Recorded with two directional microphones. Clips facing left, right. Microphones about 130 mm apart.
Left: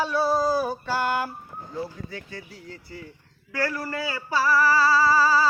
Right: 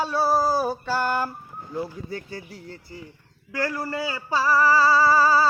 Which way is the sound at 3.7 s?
20° right (ahead or behind).